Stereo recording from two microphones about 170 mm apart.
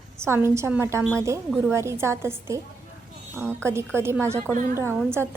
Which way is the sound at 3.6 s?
15° right (ahead or behind).